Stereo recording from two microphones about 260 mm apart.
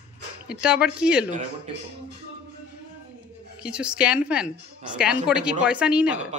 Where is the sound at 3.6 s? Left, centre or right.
Centre.